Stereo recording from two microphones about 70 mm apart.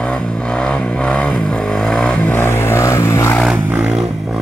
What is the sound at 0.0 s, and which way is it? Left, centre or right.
Vehicle, centre.